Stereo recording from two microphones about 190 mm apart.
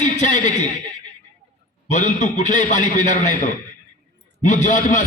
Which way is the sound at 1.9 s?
40° left (ahead or behind).